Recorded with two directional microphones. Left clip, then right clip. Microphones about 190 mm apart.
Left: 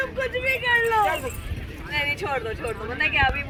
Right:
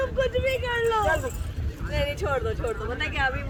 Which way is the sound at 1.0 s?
10° right (ahead or behind).